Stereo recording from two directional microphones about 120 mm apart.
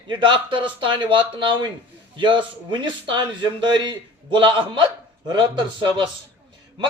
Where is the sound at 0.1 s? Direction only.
45° right (ahead or behind).